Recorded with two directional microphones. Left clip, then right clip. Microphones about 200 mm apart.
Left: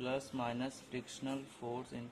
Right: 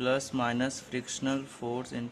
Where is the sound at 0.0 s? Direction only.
10° right (ahead or behind).